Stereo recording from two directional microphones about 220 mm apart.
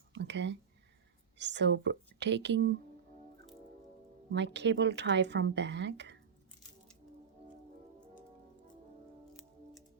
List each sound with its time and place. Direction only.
0.1 s a sound: 50° right (ahead or behind)
1.4 s a woman's voice: 55° right (ahead or behind)
4.3 s a woman's voice: 50° right (ahead or behind)